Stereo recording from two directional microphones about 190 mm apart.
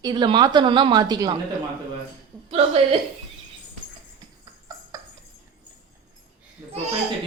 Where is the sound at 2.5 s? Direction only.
30° right (ahead or behind).